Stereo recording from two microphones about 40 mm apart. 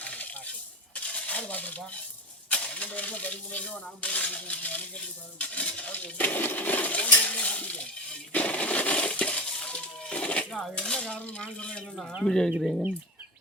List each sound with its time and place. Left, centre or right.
0.0 s coin: left
0.9 s a sound: left
2.5 s coin: left
5.5 s coin: left
5.9 s dishes: left
8.3 s coin: left
10.8 s speech: left
12.5 s speech: centre